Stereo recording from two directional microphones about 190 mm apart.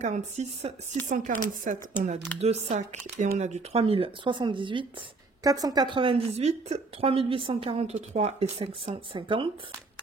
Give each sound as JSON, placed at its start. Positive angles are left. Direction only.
{"t": 0.0, "sound": "a woman's voice", "side_deg": -40}